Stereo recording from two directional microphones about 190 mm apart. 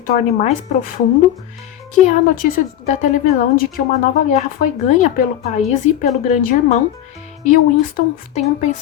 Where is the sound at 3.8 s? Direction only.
45° left (ahead or behind).